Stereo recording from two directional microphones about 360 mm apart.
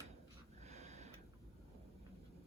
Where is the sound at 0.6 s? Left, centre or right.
Centre.